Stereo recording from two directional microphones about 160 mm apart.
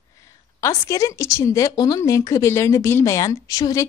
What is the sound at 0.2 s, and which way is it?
A woman's voice, 20° left (ahead or behind).